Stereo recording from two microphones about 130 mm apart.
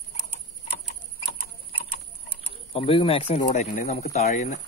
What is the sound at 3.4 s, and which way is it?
Speech, 65° left (ahead or behind).